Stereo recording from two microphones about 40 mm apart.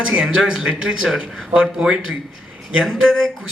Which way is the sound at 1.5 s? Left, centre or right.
Right.